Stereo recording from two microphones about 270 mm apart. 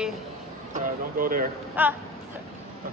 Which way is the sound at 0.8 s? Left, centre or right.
Right.